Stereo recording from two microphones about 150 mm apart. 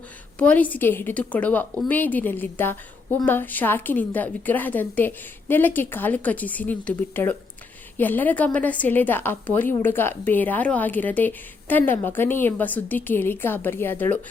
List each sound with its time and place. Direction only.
0.3 s a woman's voice: 10° left (ahead or behind)